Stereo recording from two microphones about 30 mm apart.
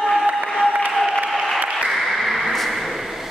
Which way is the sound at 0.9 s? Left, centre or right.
Centre.